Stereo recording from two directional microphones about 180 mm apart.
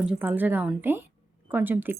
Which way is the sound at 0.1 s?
10° right (ahead or behind).